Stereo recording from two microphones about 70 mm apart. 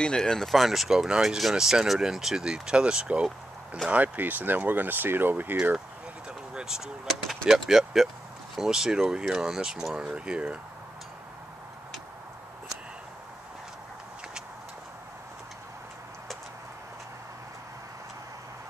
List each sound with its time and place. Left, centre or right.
0.0 s speech: centre
3.9 s speech: right
6.5 s a sound: centre
7.4 s speech: centre